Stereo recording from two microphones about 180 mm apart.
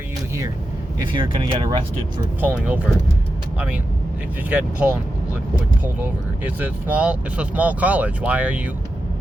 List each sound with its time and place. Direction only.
1.0 s speech: 25° right (ahead or behind)
2.4 s speech: 5° right (ahead or behind)
4.4 s speech: 10° right (ahead or behind)
6.4 s speech: 10° right (ahead or behind)